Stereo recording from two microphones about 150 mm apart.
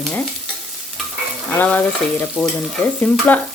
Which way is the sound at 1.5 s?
10° left (ahead or behind).